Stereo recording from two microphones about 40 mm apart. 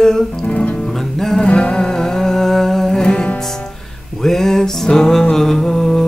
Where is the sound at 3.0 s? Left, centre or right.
Left.